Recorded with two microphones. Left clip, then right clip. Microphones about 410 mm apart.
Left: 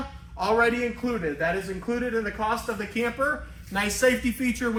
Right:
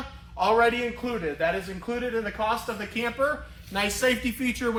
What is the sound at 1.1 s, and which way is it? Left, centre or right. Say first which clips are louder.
Speech: even; centre.